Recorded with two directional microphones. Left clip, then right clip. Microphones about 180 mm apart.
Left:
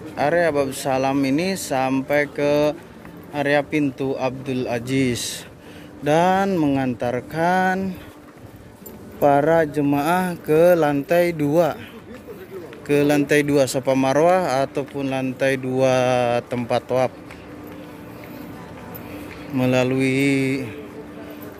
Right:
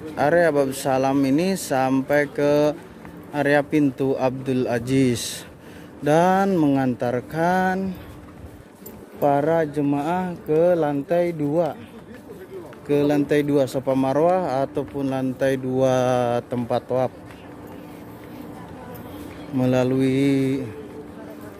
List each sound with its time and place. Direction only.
0.1 s speech: 35° right (ahead or behind); by 7.9 s 15° right (ahead or behind)
9.2 s speech: 5° left (ahead or behind)
12.8 s speech: 5° right (ahead or behind)
19.5 s speech: 15° right (ahead or behind)